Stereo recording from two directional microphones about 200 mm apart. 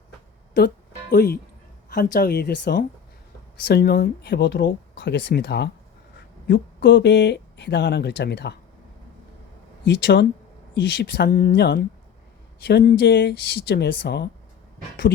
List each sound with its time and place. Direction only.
1.1 s speech: 50° left (ahead or behind)
9.8 s speech: 60° left (ahead or behind)